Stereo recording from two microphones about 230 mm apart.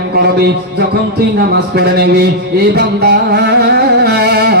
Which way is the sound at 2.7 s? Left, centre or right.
Right.